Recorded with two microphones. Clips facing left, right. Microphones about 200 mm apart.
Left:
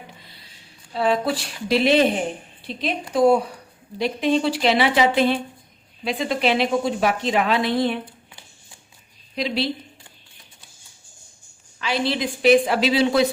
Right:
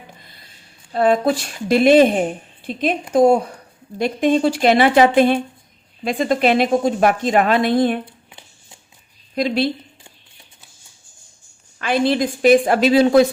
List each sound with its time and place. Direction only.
0.9 s a woman's voice: 50° right (ahead or behind)
8.3 s a sound: 20° right (ahead or behind)
9.3 s a woman's voice: 50° right (ahead or behind)
11.8 s a woman's voice: 50° right (ahead or behind)